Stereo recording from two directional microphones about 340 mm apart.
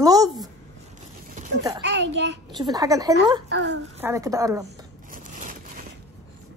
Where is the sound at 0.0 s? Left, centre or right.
Centre.